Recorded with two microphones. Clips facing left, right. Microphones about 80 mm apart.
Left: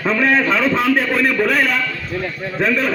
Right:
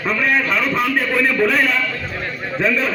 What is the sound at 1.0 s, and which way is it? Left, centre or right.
Speech, centre.